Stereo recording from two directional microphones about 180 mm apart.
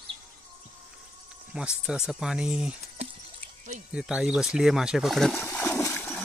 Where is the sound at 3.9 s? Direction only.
5° right (ahead or behind).